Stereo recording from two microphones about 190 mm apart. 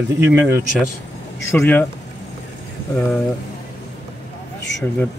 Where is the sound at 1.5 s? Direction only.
10° left (ahead or behind).